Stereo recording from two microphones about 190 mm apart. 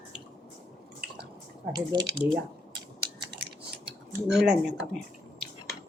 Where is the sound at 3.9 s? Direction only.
Centre (ahead or behind).